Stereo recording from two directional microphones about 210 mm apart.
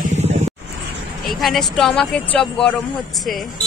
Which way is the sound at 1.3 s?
Centre (ahead or behind).